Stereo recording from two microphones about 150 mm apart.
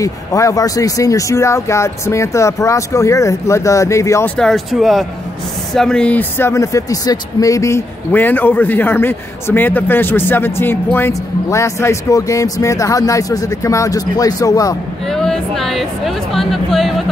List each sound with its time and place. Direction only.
0.0 s speech: 20° left (ahead or behind)
4.4 s speech: centre (ahead or behind); by 14.8 s 25° left (ahead or behind)
15.0 s speech: 5° left (ahead or behind)